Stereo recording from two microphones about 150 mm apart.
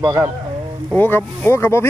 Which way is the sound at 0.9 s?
15° left (ahead or behind).